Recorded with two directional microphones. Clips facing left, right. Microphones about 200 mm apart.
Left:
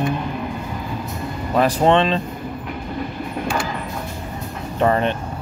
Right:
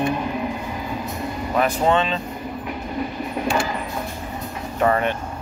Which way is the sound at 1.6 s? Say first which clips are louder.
Left 4 dB; 30° left (ahead or behind).